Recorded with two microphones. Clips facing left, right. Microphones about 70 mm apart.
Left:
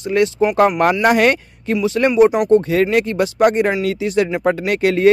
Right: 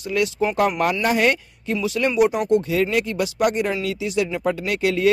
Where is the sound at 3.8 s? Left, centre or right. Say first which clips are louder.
Left 6 dB; left.